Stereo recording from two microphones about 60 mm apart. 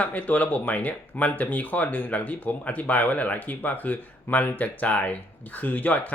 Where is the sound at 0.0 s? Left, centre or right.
Left.